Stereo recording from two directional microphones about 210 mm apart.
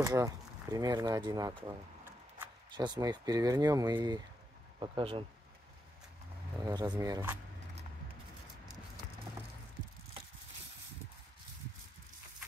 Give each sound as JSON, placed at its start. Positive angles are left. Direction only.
{"t": 0.0, "sound": "speech", "side_deg": -15}
{"t": 2.7, "sound": "speech", "side_deg": -20}
{"t": 6.6, "sound": "speech", "side_deg": -15}